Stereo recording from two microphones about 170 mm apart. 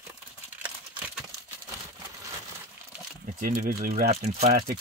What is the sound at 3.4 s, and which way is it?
Speech, 55° right (ahead or behind).